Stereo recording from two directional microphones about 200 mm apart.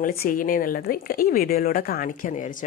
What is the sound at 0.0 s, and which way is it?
A woman's voice, 45° left (ahead or behind).